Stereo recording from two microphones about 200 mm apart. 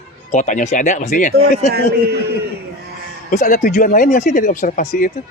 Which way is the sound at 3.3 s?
40° left (ahead or behind).